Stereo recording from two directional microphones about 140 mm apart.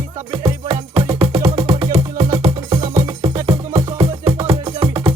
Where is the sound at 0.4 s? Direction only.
40° right (ahead or behind).